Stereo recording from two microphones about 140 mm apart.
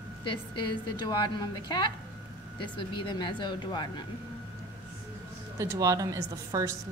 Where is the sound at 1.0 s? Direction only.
30° left (ahead or behind).